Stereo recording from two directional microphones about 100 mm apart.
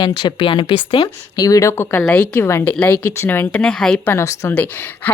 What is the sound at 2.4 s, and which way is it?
Speech, 25° left (ahead or behind).